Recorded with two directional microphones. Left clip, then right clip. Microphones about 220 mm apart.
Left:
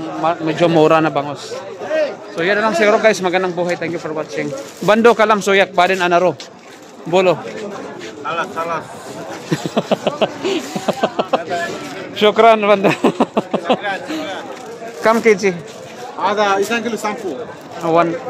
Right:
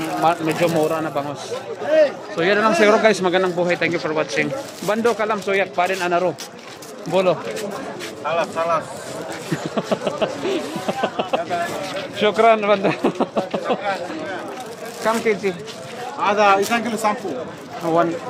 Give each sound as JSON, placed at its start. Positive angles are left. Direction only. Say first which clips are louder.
{"t": 0.2, "sound": "speech", "louder": "left 1 dB", "side_deg": 0}
{"t": 0.8, "sound": "speech", "louder": "left 9 dB", "side_deg": 50}
{"t": 2.3, "sound": "speech", "louder": "left 2 dB", "side_deg": 0}
{"t": 4.8, "sound": "speech", "louder": "left 9 dB", "side_deg": 55}
{"t": 7.1, "sound": "speech", "louder": "left 4 dB", "side_deg": 45}
{"t": 8.3, "sound": "speech", "louder": "right 1 dB", "side_deg": -10}
{"t": 9.8, "sound": "speech", "louder": "left 5 dB", "side_deg": 45}
{"t": 16.2, "sound": "speech", "louder": "even", "side_deg": -10}
{"t": 16.7, "sound": "speech", "louder": "even", "side_deg": -25}
{"t": 17.8, "sound": "speech", "louder": "left 5 dB", "side_deg": 35}